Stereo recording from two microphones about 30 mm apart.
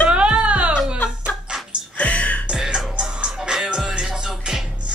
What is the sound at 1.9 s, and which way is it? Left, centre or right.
Music, left.